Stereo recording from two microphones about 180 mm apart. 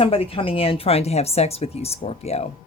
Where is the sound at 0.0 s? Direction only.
30° left (ahead or behind).